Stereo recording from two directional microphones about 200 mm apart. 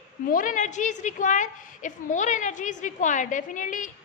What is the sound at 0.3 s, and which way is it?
A woman's voice, 40° left (ahead or behind).